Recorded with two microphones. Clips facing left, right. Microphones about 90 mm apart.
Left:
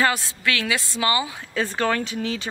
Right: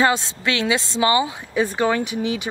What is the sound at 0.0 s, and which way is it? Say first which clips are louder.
A woman's voice: right 3 dB; 20° right (ahead or behind).